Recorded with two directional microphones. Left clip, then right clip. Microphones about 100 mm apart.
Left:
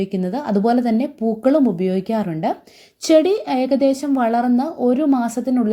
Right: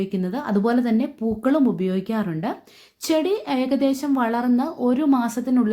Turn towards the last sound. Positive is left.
turn(degrees=25)  # may be behind; listen again after turning